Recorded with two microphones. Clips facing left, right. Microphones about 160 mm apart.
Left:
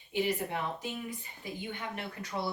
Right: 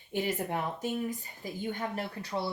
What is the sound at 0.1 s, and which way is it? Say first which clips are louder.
Speech: left 1 dB; 50° right (ahead or behind).